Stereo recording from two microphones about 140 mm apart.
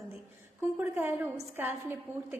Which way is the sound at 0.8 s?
15° right (ahead or behind).